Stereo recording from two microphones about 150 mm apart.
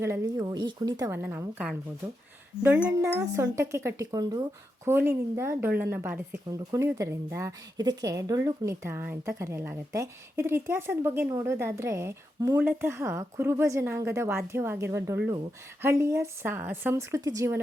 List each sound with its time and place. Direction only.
0.0 s a woman's voice: 20° right (ahead or behind)
1.2 s a woman's voice: 10° right (ahead or behind)
4.9 s a woman's voice: 15° right (ahead or behind)